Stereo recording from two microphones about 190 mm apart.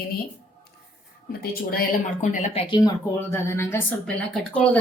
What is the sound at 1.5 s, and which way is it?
Speech, 50° left (ahead or behind).